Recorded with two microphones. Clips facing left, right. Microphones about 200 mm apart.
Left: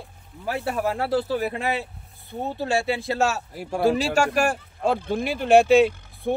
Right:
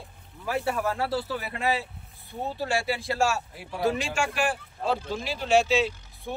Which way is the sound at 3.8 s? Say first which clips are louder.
Left 6 dB; 35° left (ahead or behind).